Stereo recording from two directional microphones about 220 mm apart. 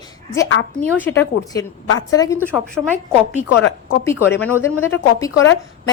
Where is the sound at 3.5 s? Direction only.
50° left (ahead or behind).